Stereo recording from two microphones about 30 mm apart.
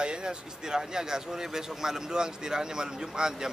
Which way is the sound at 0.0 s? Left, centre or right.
Right.